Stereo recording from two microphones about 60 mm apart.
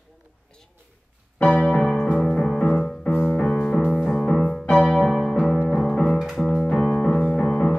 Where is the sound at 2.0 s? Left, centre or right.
Centre.